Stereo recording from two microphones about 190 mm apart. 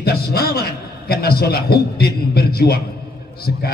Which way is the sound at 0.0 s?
55° left (ahead or behind).